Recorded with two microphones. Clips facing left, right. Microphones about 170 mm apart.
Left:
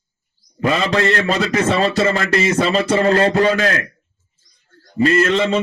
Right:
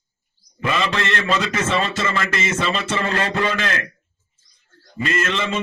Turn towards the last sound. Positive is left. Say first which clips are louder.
# left 8 dB
turn(degrees=35)  # may be behind; listen again after turning